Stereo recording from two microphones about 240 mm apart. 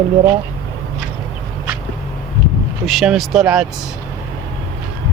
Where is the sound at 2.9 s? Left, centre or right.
Centre.